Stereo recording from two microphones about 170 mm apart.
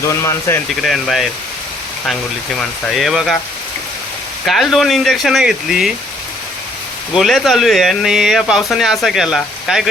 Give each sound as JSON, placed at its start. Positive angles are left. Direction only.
{"t": 0.0, "sound": "speech", "side_deg": 20}
{"t": 0.8, "sound": "speech", "side_deg": 0}
{"t": 2.6, "sound": "speech", "side_deg": 0}
{"t": 4.4, "sound": "speech", "side_deg": 0}
{"t": 7.2, "sound": "speech", "side_deg": 0}